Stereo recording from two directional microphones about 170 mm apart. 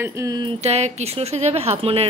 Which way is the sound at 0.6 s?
40° right (ahead or behind).